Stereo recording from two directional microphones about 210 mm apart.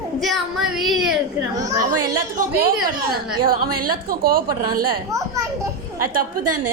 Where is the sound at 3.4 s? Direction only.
45° right (ahead or behind).